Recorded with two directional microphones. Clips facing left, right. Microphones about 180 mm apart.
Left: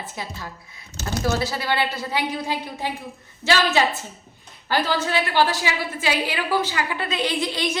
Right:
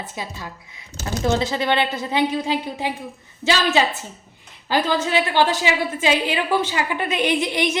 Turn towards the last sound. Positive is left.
turn(degrees=-20)  # may be behind; listen again after turning